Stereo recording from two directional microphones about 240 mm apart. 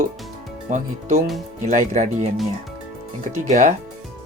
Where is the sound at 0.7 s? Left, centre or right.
Right.